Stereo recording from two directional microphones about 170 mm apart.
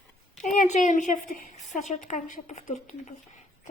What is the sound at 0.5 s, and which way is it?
A woman's voice, 50° left (ahead or behind).